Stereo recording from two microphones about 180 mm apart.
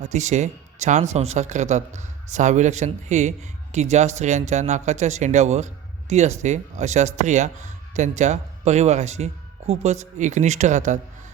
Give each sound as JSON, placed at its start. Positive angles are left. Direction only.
{"t": 0.0, "sound": "speech", "side_deg": -40}